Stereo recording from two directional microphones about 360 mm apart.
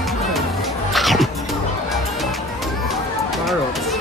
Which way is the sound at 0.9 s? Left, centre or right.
Centre.